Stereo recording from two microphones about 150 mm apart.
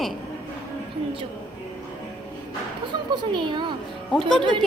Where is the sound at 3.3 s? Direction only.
30° right (ahead or behind).